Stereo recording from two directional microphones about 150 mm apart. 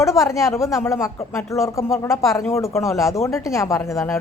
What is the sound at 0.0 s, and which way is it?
A woman's voice, 20° left (ahead or behind).